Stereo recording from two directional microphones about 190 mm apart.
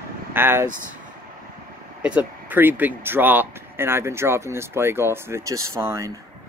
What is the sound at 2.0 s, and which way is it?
Speech, 10° right (ahead or behind).